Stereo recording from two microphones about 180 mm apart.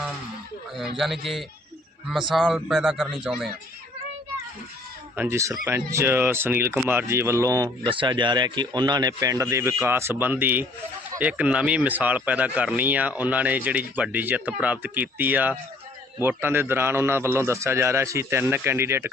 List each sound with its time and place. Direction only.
0.8 s speech: centre (ahead or behind)
5.1 s speech: 10° right (ahead or behind)